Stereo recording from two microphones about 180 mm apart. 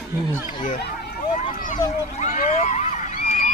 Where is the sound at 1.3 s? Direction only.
45° left (ahead or behind).